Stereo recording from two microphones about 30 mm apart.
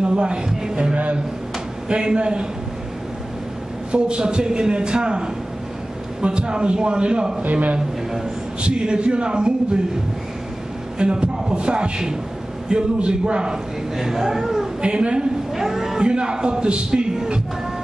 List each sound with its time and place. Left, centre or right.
0.0 s a man's voice: right
1.9 s a man's voice: right
3.9 s a man's voice: right
8.6 s a man's voice: right
11.0 s a man's voice: right
13.5 s speech: centre
14.8 s a man's voice: right
15.5 s a sound: centre
16.0 s a man's voice: right